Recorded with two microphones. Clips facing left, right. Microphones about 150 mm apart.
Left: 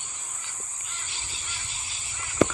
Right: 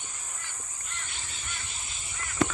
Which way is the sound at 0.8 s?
5° left (ahead or behind).